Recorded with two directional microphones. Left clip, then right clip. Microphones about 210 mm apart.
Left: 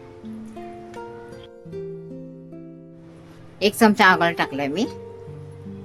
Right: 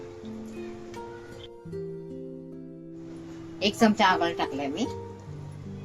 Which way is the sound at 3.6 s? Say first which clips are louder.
Left 7 dB; 30° left (ahead or behind).